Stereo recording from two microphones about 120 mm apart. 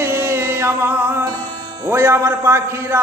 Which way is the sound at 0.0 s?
20° right (ahead or behind).